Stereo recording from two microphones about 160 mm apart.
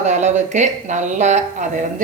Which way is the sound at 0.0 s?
45° right (ahead or behind).